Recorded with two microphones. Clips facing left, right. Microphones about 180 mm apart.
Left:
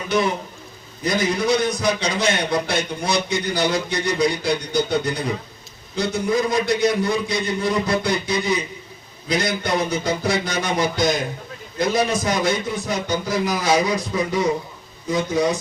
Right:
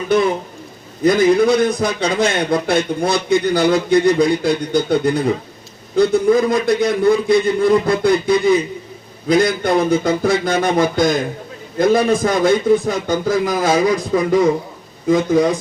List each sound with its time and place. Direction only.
1.0 s a man's voice: 55° right (ahead or behind)